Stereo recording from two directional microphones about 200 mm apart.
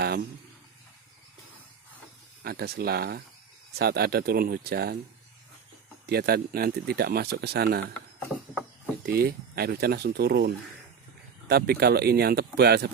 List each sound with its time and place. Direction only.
2.4 s speech: 50° right (ahead or behind)
6.0 s speech: 50° right (ahead or behind)
9.0 s speech: 50° right (ahead or behind)